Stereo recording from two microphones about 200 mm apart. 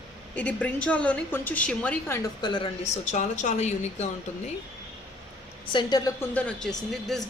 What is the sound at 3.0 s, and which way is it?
A woman's voice, 40° left (ahead or behind).